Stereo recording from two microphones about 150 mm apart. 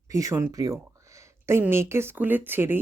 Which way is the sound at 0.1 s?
20° right (ahead or behind).